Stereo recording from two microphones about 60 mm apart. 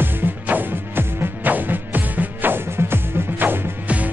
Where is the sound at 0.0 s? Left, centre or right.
Right.